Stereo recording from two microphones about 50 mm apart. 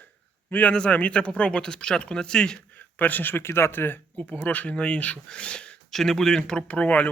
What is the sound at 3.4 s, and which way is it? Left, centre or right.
Speech, left.